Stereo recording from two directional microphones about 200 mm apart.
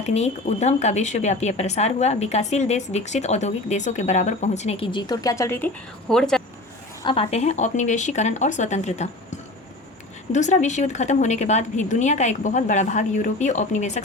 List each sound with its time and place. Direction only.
0.0 s speech: 35° left (ahead or behind); by 6.4 s centre (ahead or behind)
7.0 s speech: 25° left (ahead or behind)
10.3 s speech: 35° left (ahead or behind)